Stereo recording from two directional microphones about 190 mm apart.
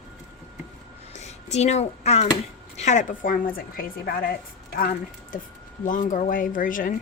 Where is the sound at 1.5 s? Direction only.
35° left (ahead or behind).